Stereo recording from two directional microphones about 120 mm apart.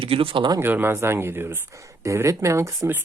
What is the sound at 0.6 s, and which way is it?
Speech, 20° right (ahead or behind).